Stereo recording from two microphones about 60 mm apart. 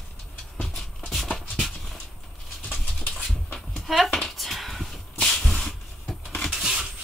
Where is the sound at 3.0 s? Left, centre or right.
Left.